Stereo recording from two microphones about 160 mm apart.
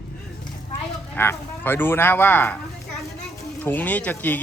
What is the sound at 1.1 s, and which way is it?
Speech, 15° left (ahead or behind).